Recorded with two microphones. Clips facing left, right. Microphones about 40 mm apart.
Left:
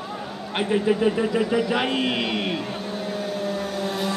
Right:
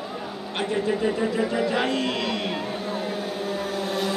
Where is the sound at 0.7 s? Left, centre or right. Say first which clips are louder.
Left 4 dB; left.